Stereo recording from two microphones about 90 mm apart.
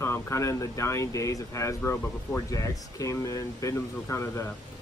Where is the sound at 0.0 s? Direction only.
35° left (ahead or behind).